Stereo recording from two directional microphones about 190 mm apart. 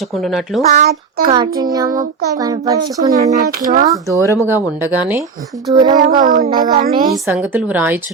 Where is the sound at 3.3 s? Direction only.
45° right (ahead or behind).